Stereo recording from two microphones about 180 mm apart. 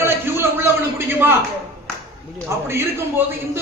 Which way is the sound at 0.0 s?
15° right (ahead or behind).